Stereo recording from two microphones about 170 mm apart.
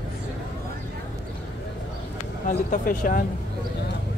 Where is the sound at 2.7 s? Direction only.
50° left (ahead or behind).